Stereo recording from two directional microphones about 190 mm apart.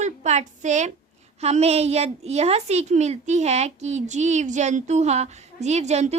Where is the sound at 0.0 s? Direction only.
35° right (ahead or behind).